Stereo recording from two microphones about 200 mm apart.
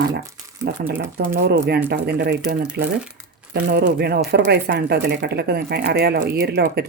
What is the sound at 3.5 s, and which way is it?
Speech, 55° right (ahead or behind).